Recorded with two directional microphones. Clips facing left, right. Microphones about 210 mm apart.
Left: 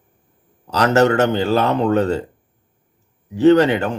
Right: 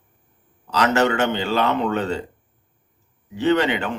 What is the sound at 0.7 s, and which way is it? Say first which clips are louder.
Speech: left 4 dB; 40° left (ahead or behind).